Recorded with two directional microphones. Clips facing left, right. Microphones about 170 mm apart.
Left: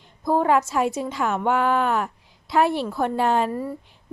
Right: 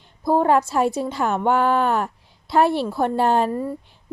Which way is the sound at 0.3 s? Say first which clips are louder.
Right 2 dB; 30° right (ahead or behind).